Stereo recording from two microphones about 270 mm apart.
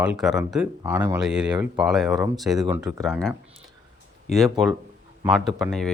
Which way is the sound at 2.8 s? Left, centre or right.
Centre.